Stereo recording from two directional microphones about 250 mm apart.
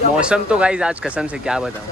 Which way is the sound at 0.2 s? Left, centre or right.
Centre.